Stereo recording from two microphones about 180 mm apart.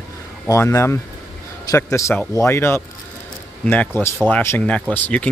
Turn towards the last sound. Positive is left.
turn(degrees=10)  # may be behind; listen again after turning